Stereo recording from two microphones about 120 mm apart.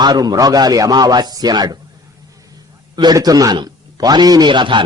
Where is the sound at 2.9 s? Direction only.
35° right (ahead or behind).